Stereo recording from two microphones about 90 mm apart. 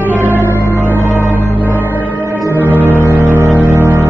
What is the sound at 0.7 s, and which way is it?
Music, 25° right (ahead or behind).